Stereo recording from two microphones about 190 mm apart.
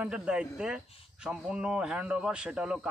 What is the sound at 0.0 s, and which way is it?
Speech, 5° right (ahead or behind).